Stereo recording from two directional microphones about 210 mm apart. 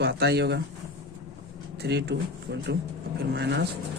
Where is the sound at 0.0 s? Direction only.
50° right (ahead or behind).